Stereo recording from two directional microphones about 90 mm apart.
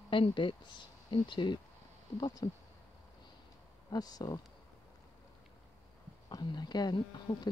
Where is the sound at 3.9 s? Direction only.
45° left (ahead or behind).